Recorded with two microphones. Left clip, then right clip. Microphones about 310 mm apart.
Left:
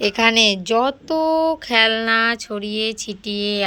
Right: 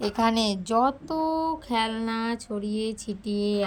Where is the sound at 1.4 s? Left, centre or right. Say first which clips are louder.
Left 9 dB; centre.